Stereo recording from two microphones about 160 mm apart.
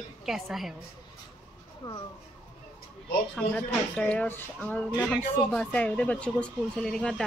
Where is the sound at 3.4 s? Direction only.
10° left (ahead or behind).